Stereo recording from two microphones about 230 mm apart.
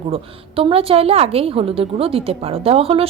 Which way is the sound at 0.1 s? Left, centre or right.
Right.